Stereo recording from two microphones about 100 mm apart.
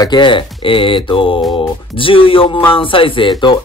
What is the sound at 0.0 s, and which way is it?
Speech, 50° left (ahead or behind).